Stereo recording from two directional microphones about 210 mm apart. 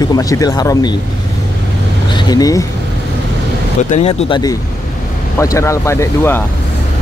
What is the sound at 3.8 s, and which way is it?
Speech, 35° left (ahead or behind).